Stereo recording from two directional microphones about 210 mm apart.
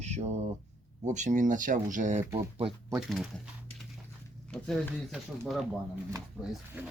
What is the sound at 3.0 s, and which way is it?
Speech, centre (ahead or behind).